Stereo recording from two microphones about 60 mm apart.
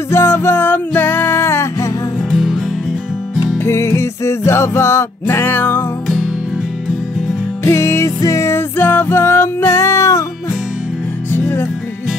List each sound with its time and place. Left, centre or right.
0.1 s music: left
2.3 s music: centre
3.6 s music: left
7.6 s music: left
11.3 s music: left